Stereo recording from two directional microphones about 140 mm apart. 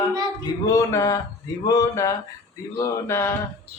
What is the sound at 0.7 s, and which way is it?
Speech, 25° left (ahead or behind).